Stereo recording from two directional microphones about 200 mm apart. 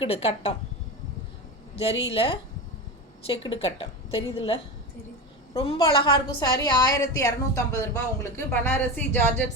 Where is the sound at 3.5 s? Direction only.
30° left (ahead or behind).